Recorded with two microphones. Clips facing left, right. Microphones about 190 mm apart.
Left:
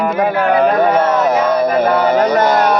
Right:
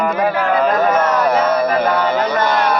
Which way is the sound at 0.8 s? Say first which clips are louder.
Left 2 dB; 30° left (ahead or behind).